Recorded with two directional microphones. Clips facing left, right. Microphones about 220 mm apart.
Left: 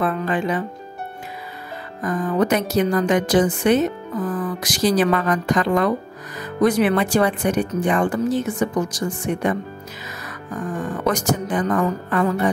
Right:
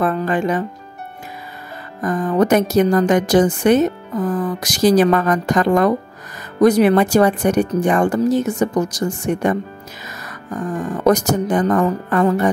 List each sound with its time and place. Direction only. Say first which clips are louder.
0.0 s a woman's voice: right 3 dB; 45° right (ahead or behind)
2.0 s a woman's voice: right 4 dB; 45° right (ahead or behind)
10.8 s a woman's voice: right 7 dB; 40° right (ahead or behind)